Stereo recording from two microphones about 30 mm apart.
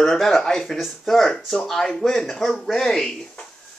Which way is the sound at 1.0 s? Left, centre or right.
Centre.